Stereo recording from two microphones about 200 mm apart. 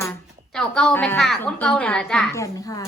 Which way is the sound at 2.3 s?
15° left (ahead or behind).